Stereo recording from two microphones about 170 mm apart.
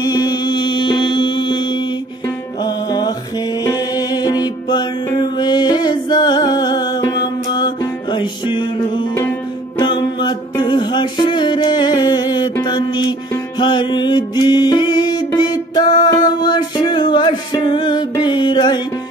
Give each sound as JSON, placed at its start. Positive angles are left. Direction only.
{"t": 0.0, "sound": "mantra", "side_deg": 25}
{"t": 2.6, "sound": "music", "side_deg": 25}
{"t": 12.6, "sound": "mantra", "side_deg": 25}
{"t": 13.6, "sound": "music", "side_deg": 25}